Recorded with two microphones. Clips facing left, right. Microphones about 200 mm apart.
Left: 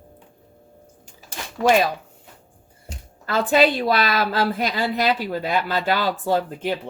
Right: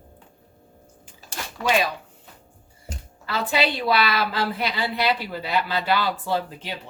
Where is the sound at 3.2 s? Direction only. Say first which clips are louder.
Left 6 dB; 45° left (ahead or behind).